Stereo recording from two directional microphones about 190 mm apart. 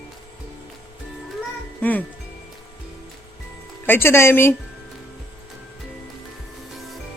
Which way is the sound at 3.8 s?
10° left (ahead or behind).